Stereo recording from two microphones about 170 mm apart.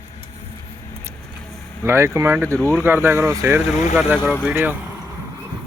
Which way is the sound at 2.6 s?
15° left (ahead or behind).